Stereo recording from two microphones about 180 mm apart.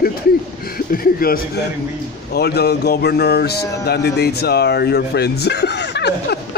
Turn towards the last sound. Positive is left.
turn(degrees=65)  # may be behind; listen again after turning